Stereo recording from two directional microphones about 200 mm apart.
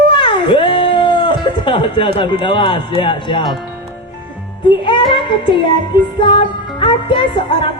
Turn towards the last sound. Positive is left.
turn(degrees=25)  # may be behind; listen again after turning